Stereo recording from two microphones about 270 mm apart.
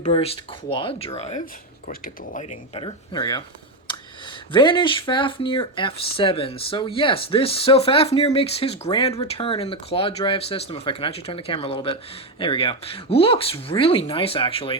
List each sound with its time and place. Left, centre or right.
0.0 s speech: left
2.7 s speech: centre
4.5 s speech: centre